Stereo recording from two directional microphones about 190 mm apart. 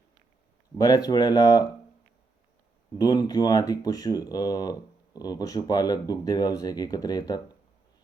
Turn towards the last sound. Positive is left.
turn(degrees=20)  # may be behind; listen again after turning